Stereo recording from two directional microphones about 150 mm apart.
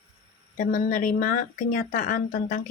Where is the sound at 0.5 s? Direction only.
60° left (ahead or behind).